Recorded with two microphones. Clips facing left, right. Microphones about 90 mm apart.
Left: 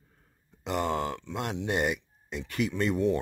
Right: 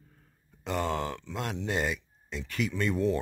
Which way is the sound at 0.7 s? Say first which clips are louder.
Left 1 dB; 15° left (ahead or behind).